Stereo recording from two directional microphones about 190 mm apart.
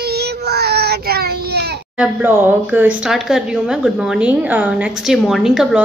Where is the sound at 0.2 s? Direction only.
60° right (ahead or behind).